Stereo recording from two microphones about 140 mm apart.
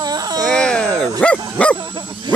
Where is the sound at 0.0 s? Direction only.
30° right (ahead or behind).